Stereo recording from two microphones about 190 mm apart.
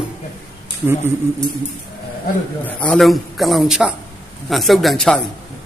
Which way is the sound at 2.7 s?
5° left (ahead or behind).